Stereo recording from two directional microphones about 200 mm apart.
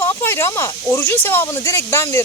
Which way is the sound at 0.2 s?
10° left (ahead or behind).